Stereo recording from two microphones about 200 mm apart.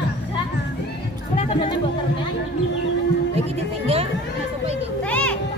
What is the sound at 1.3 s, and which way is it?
Chatter, 35° left (ahead or behind).